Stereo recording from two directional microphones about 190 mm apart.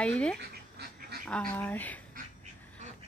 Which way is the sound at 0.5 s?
55° right (ahead or behind).